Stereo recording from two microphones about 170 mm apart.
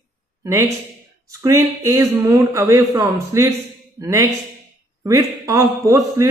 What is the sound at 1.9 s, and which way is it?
Speech, 20° right (ahead or behind).